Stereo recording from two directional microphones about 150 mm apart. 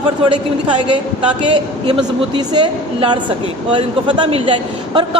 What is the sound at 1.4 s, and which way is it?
A man's voice, 30° right (ahead or behind).